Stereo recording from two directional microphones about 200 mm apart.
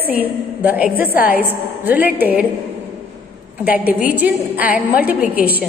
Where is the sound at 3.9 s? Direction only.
10° right (ahead or behind).